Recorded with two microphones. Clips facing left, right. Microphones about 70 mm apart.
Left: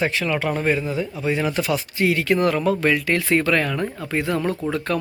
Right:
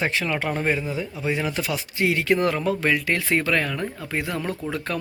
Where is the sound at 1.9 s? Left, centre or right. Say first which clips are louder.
Left 1 dB; right.